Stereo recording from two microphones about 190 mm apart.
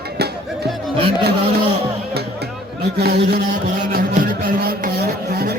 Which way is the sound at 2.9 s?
60° right (ahead or behind).